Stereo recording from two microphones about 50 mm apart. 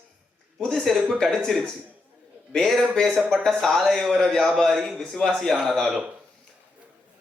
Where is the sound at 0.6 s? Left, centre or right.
Centre.